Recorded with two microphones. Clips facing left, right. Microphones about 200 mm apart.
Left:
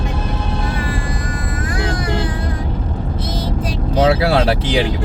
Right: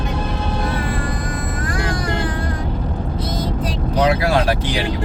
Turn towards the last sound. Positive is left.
turn(degrees=25)  # may be behind; listen again after turning